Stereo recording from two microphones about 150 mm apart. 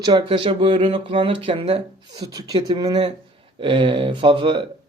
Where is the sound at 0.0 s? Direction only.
30° right (ahead or behind).